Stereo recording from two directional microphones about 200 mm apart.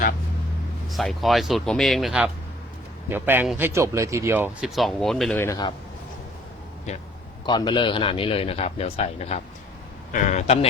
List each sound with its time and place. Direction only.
0.9 s a man's voice: centre (ahead or behind); by 5.7 s 20° left (ahead or behind)
7.4 s a man's voice: 20° left (ahead or behind)